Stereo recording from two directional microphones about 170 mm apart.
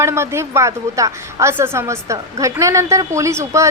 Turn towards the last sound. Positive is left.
turn(degrees=-15)  # may be behind; listen again after turning